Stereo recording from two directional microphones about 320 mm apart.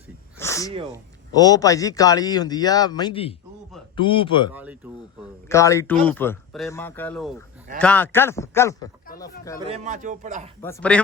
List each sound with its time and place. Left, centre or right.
0.3 s a sound: centre
1.4 s a man's voice: centre
4.5 s speech: centre
5.5 s a man's voice: centre
9.6 s speech: centre
10.6 s speech: centre